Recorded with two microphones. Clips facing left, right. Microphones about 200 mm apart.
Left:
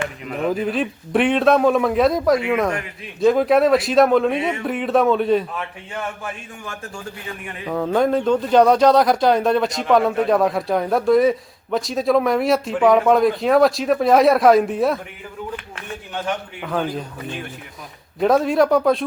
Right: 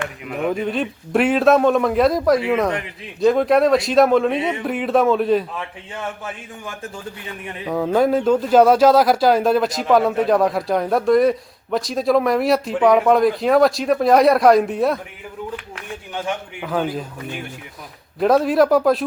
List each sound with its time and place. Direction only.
0.3 s speech: centre (ahead or behind)
6.7 s a man's voice: 15° right (ahead or behind)
7.7 s speech: 5° right (ahead or behind)
15.7 s a man's voice: 10° right (ahead or behind)